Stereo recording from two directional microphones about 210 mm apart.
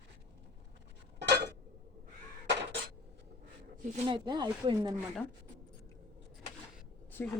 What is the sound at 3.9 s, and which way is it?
Speech, 25° right (ahead or behind).